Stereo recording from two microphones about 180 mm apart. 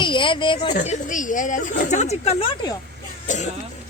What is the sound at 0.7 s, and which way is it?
Speech, 45° left (ahead or behind).